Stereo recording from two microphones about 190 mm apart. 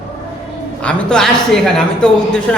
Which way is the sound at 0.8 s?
5° left (ahead or behind).